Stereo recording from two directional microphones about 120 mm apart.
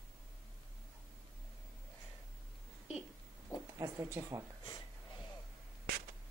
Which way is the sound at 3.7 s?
25° right (ahead or behind).